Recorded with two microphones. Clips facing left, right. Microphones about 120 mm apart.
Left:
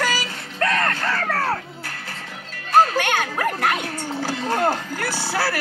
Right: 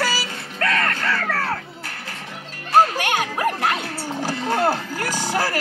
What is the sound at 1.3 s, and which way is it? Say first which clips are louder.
Music: left 2 dB; 35° left (ahead or behind).